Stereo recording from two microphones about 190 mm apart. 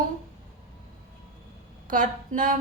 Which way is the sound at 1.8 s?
45° right (ahead or behind).